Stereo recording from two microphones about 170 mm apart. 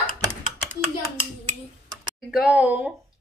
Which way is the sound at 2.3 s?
5° right (ahead or behind).